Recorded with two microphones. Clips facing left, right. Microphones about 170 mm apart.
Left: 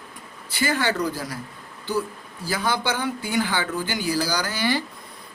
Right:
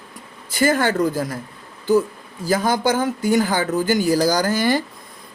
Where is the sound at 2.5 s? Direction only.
45° right (ahead or behind).